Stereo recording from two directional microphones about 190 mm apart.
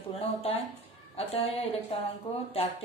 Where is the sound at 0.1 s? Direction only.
30° left (ahead or behind).